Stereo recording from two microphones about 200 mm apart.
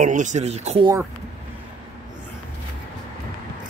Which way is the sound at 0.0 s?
40° right (ahead or behind).